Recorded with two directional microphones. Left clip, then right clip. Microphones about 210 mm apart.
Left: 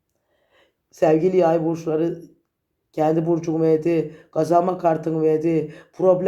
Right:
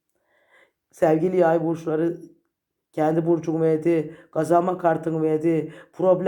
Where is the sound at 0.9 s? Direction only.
25° right (ahead or behind).